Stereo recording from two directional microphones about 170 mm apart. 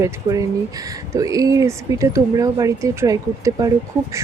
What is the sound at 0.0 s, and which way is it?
A woman's voice, 20° right (ahead or behind).